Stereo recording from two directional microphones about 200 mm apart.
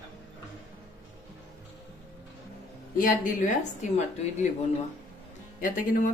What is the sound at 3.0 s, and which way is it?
A woman's voice, 40° left (ahead or behind).